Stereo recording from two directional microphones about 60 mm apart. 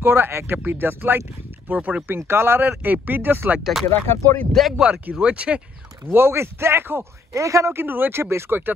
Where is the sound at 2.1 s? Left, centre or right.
Right.